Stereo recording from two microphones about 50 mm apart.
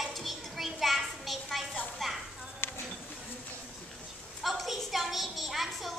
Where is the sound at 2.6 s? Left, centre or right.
Left.